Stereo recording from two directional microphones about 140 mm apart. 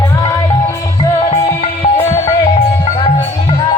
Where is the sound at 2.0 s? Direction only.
20° left (ahead or behind).